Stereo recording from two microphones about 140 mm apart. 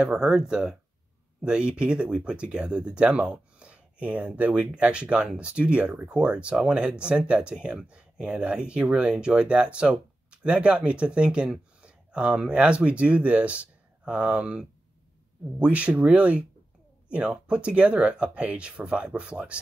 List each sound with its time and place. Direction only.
0.0 s speech: 5° right (ahead or behind)